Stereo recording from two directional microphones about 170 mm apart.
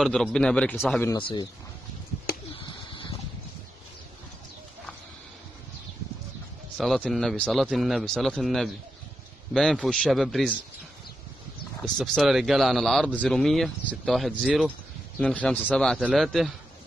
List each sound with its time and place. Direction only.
0.0 s speech: 5° left (ahead or behind)
1.1 s speech: 25° left (ahead or behind)
2.5 s pigeon: 30° left (ahead or behind)
6.8 s speech: centre (ahead or behind)
11.8 s speech: centre (ahead or behind)